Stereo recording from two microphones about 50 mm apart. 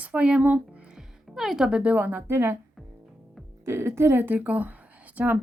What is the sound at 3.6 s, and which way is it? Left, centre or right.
Speech, right.